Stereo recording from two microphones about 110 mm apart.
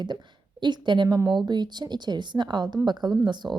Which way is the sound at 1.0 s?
30° right (ahead or behind).